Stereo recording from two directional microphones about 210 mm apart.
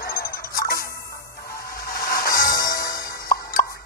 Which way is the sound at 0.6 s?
45° left (ahead or behind).